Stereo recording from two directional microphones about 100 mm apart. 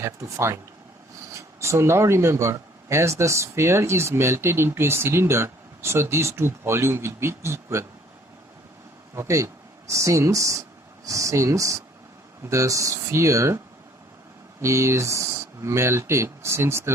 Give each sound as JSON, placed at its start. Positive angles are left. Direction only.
{"t": 0.0, "sound": "speech", "side_deg": -30}
{"t": 9.1, "sound": "speech", "side_deg": -30}
{"t": 14.6, "sound": "speech", "side_deg": -25}